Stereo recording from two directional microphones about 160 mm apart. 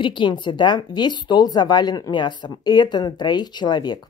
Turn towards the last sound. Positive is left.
turn(degrees=25)  # may be behind; listen again after turning